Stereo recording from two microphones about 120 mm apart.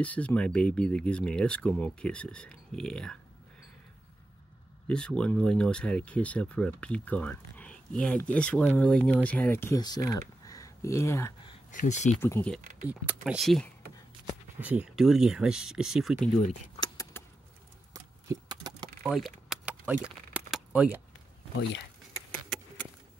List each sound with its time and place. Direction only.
0.0 s speech: 10° left (ahead or behind)
4.8 s speech: 5° left (ahead or behind)
9.8 s speech: 35° left (ahead or behind)
11.8 s speech: 85° left
12.2 s speech: 20° left (ahead or behind)
12.8 s speech: 15° right (ahead or behind)
14.6 s speech: 10° right (ahead or behind)
16.8 s a sound: 30° left (ahead or behind)
18.5 s keys jangling: 35° right (ahead or behind)
19.0 s a sound: 5° right (ahead or behind)
22.3 s a sound: 10° left (ahead or behind)